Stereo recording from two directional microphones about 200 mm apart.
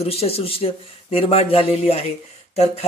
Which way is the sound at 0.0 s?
30° left (ahead or behind).